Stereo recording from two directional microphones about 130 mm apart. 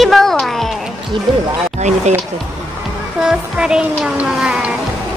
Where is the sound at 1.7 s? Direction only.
65° right (ahead or behind).